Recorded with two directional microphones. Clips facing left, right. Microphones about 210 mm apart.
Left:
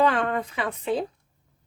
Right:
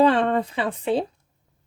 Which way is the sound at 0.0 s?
30° right (ahead or behind).